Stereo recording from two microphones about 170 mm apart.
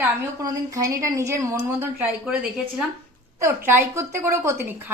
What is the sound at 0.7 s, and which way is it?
A woman's voice, 20° right (ahead or behind).